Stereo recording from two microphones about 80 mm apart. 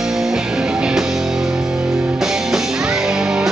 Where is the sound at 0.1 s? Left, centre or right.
Centre.